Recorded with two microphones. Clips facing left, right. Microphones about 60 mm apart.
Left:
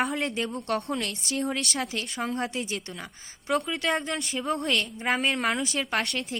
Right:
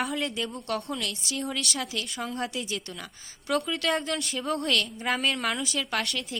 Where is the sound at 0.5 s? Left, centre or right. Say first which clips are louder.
Left 3 dB; left.